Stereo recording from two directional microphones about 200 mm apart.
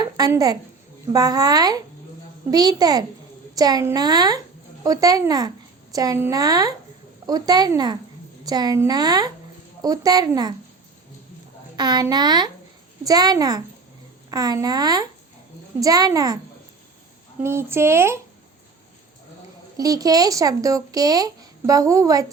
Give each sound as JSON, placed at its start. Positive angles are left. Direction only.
{"t": 0.0, "sound": "a woman's voice", "side_deg": -20}
{"t": 11.8, "sound": "a woman's voice", "side_deg": -20}
{"t": 17.4, "sound": "speech", "side_deg": -10}
{"t": 19.7, "sound": "speech", "side_deg": -20}